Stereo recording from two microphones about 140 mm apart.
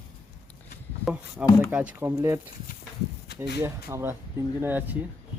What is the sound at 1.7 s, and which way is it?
Speech, 10° right (ahead or behind).